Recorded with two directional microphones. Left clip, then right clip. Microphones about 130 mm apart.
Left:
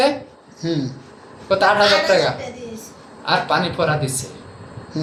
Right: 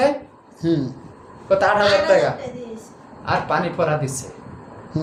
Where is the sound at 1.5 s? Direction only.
5° right (ahead or behind).